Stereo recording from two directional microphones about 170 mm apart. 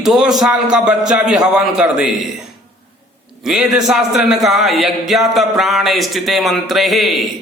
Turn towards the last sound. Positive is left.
turn(degrees=0)  # may be behind; listen again after turning